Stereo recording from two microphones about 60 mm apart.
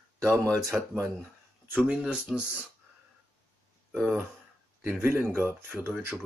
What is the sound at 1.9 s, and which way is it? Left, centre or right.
Speech, centre.